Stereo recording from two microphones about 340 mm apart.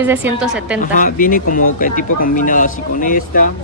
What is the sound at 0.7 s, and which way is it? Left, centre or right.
Speech, left.